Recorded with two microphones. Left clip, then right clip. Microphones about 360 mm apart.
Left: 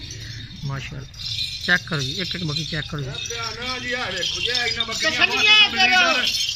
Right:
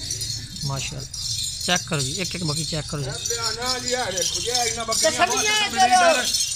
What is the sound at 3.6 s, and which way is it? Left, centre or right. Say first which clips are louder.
Speech: even; centre.